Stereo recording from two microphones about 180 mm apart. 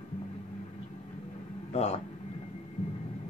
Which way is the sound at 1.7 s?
35° left (ahead or behind).